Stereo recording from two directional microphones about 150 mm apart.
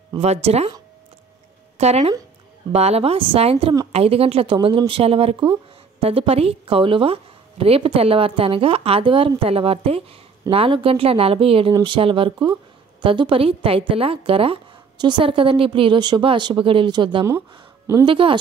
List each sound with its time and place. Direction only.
0.2 s speech: 45° right (ahead or behind)
1.8 s speech: 45° right (ahead or behind)